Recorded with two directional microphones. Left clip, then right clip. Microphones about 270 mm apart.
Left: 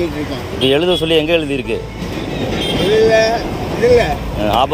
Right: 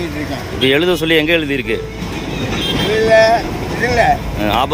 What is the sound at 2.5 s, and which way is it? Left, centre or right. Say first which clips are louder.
Vehicle: left 1 dB; centre.